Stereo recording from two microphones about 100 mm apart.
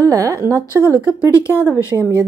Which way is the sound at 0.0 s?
35° right (ahead or behind).